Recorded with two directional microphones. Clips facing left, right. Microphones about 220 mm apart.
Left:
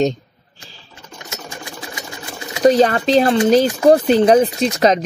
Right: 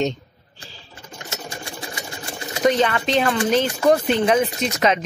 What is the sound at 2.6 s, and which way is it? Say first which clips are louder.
Speech: left 6 dB; 35° left (ahead or behind).